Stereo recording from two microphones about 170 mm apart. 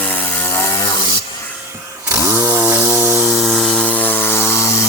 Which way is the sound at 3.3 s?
Centre (ahead or behind).